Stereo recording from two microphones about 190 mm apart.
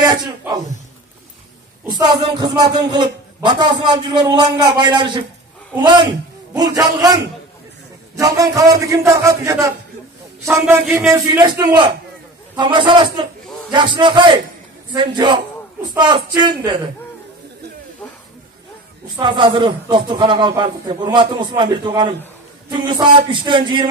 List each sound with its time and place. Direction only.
0.0 s a sound: 20° right (ahead or behind)
1.9 s a man's voice: 25° right (ahead or behind)
8.2 s a man's voice: 15° right (ahead or behind)
19.1 s a man's voice: 25° right (ahead or behind)